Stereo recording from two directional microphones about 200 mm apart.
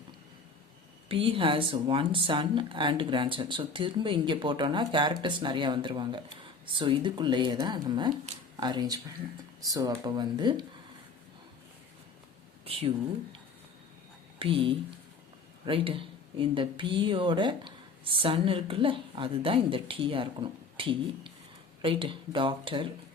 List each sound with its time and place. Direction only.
1.0 s speech: 25° right (ahead or behind)
12.6 s speech: 25° right (ahead or behind)
14.3 s speech: 25° right (ahead or behind)